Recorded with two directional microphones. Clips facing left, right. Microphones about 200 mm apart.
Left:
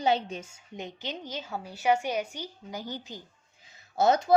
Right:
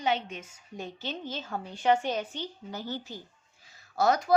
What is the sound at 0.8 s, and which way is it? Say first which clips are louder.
A woman's voice: even; 15° left (ahead or behind).